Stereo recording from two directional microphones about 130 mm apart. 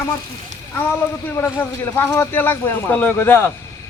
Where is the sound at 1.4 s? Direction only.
15° left (ahead or behind).